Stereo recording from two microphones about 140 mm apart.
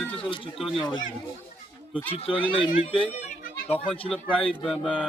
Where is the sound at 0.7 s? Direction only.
35° left (ahead or behind).